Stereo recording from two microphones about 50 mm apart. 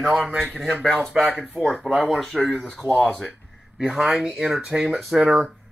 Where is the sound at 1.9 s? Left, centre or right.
Centre.